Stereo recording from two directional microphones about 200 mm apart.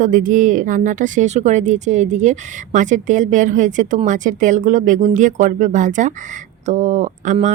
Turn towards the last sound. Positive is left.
turn(degrees=-35)  # may be behind; listen again after turning